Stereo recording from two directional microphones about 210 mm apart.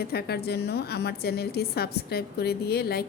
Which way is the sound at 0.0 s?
50° left (ahead or behind).